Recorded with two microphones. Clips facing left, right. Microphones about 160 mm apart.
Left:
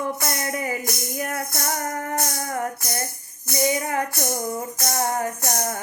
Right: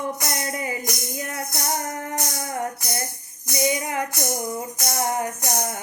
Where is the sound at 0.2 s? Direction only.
20° right (ahead or behind).